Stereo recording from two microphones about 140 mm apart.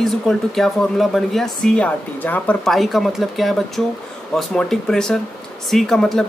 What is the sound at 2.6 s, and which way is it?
Speech, centre (ahead or behind).